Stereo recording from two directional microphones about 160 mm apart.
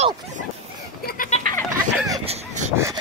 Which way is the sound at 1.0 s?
60° left (ahead or behind).